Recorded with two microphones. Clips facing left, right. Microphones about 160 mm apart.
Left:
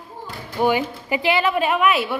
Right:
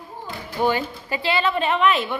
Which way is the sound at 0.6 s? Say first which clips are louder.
Left 2 dB; 15° left (ahead or behind).